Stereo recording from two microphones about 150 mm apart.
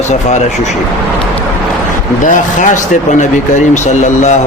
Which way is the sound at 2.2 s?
55° left (ahead or behind).